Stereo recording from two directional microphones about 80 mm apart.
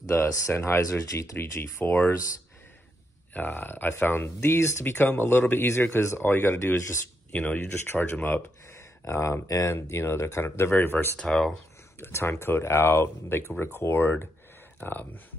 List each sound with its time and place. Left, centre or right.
0.1 s speech: left
1.4 s speech: left
3.3 s speech: left
11.1 s speech: centre
12.0 s speech: left